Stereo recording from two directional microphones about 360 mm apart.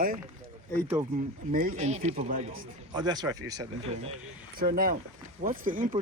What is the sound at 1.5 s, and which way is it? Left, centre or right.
A man's voice, right.